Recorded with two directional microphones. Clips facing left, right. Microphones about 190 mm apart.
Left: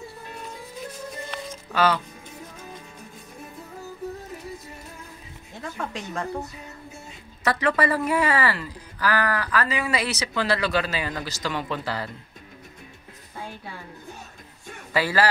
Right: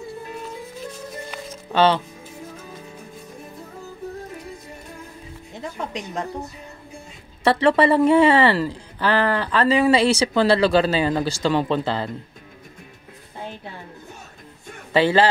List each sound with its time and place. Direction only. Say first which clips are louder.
1.7 s speech: right 5 dB; 25° right (ahead or behind)
5.6 s speech: right 2 dB; 20° right (ahead or behind)
7.4 s speech: right 6 dB; 30° right (ahead or behind)
14.9 s speech: right 6 dB; 25° right (ahead or behind)